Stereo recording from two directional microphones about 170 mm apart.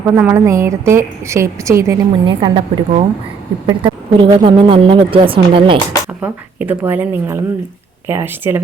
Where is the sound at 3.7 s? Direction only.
30° right (ahead or behind).